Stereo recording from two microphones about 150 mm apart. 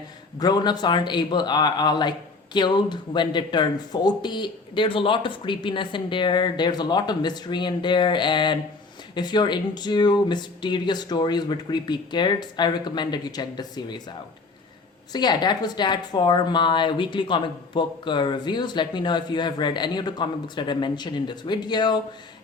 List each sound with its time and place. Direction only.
0.3 s a man's voice: 25° left (ahead or behind)
15.1 s speech: 30° left (ahead or behind)